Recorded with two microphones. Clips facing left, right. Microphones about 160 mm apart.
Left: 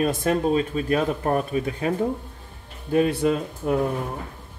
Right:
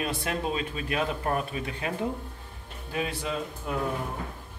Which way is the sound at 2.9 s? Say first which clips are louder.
Left 11 dB; 55° left (ahead or behind).